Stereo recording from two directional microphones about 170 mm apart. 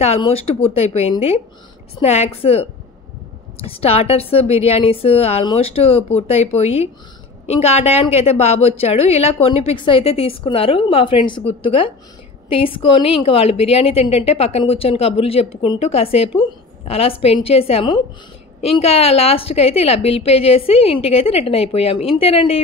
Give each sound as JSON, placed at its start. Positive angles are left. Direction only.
{"t": 0.0, "sound": "a woman's voice", "side_deg": 35}